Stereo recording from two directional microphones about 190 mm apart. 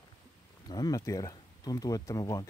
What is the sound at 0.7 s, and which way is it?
Speech, 20° left (ahead or behind).